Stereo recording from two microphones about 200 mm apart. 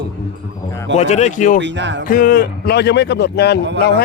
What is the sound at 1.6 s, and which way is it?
Speech, 60° right (ahead or behind).